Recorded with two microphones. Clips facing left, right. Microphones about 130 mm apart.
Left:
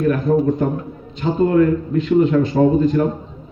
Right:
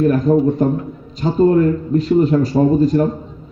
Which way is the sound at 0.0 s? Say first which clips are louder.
Right 3 dB; 40° right (ahead or behind).